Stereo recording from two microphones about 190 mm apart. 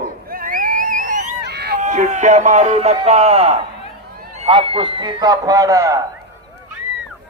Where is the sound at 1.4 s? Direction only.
60° right (ahead or behind).